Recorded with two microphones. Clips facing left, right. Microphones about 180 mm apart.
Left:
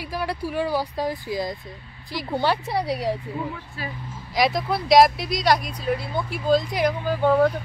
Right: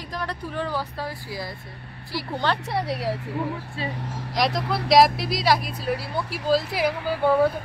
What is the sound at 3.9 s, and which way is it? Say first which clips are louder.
Speech: right 4 dB; 80° right.